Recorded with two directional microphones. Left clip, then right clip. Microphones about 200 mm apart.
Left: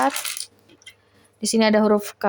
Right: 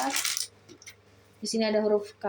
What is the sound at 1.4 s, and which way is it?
Speech, 40° left (ahead or behind).